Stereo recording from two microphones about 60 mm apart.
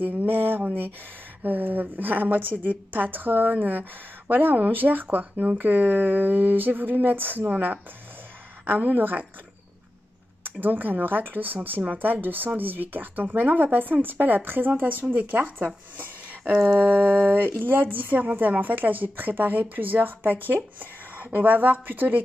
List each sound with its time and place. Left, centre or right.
0.0 s a woman's voice: right
10.4 s a woman's voice: right